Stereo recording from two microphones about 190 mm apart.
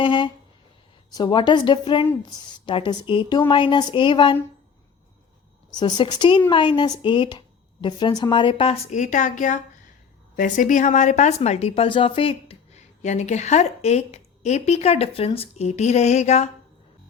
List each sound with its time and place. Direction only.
0.0 s speech: 25° left (ahead or behind)
5.7 s speech: 25° left (ahead or behind)